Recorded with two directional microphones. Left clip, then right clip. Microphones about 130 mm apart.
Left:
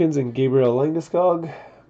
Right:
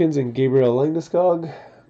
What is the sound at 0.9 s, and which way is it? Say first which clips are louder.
Speech: right 1 dB; 25° right (ahead or behind).